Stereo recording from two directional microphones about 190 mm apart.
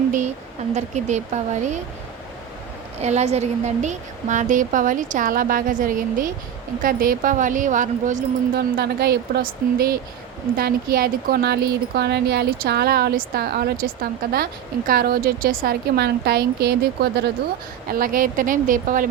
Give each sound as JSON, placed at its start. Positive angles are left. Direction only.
{"t": 0.7, "sound": "speech", "side_deg": -35}
{"t": 3.0, "sound": "speech", "side_deg": -35}
{"t": 8.5, "sound": "speech", "side_deg": -55}
{"t": 17.9, "sound": "speech", "side_deg": -50}